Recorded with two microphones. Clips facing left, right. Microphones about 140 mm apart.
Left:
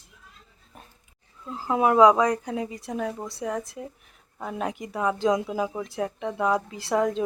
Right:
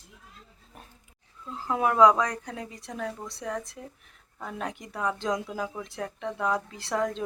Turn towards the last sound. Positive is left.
turn(degrees=5)  # may be behind; listen again after turning